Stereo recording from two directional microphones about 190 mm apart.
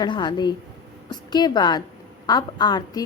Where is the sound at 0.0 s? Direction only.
25° left (ahead or behind).